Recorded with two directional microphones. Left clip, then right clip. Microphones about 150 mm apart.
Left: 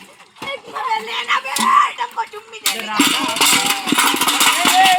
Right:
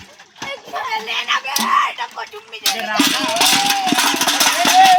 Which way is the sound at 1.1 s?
60° right (ahead or behind).